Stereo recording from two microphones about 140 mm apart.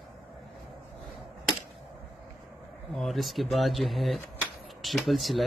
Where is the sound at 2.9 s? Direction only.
Centre (ahead or behind).